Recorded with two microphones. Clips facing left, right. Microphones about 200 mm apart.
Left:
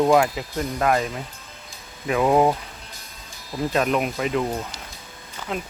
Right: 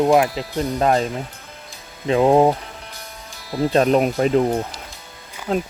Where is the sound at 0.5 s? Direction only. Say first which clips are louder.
Right 4 dB; 30° right (ahead or behind).